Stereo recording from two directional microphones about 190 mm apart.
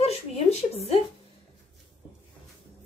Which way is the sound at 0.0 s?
35° left (ahead or behind).